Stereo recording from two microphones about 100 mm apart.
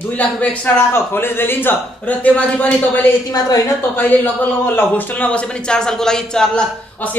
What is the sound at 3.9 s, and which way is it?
A man's voice, 15° left (ahead or behind).